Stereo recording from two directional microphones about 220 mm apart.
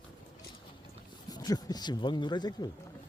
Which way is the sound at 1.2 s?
15° left (ahead or behind).